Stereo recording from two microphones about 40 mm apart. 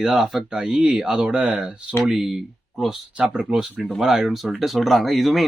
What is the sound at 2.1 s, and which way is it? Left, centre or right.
Speech, centre.